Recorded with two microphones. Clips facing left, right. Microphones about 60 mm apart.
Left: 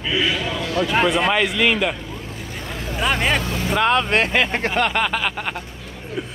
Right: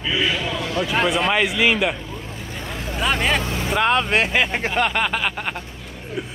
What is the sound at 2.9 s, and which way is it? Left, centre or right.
Speech, centre.